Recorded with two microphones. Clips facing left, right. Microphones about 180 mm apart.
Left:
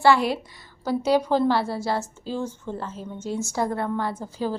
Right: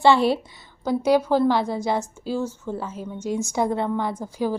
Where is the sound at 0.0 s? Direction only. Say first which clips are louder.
Right 2 dB; 25° right (ahead or behind).